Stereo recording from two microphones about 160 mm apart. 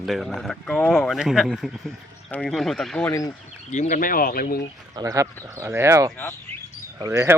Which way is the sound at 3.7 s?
50° left (ahead or behind).